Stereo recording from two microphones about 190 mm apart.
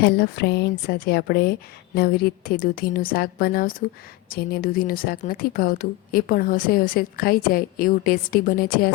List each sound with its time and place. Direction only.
0.0 s speech: 60° left (ahead or behind)